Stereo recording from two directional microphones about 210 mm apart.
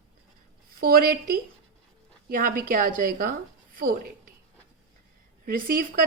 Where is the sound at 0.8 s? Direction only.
45° right (ahead or behind).